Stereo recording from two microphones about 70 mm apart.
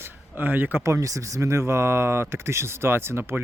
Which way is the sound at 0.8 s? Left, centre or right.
Right.